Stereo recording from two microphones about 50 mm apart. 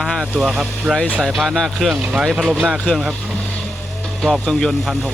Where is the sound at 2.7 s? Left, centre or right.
Centre.